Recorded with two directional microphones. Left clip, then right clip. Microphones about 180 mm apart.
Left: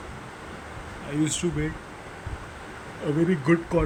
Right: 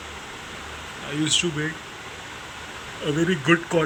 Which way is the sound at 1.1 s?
20° left (ahead or behind).